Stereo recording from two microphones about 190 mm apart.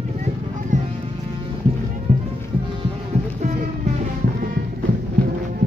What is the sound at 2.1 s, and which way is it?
Music, 40° right (ahead or behind).